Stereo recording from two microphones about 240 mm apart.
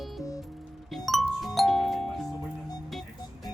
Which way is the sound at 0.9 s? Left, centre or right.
Centre.